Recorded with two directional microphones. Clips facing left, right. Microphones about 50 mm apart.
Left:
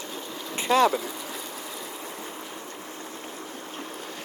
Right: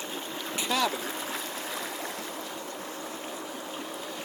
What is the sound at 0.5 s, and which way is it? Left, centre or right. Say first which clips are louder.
Speech: left 8 dB; left.